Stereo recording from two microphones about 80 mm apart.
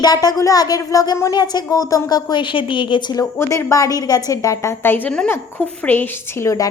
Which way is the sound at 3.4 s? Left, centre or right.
Left.